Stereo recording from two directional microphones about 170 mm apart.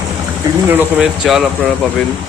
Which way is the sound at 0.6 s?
10° right (ahead or behind).